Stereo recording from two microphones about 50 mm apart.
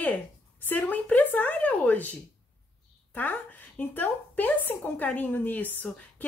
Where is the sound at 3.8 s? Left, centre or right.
Left.